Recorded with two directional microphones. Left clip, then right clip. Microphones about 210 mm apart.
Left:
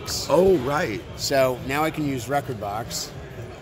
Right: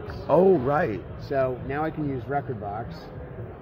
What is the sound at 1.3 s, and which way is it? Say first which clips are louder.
Speech: left 5 dB; 40° left (ahead or behind).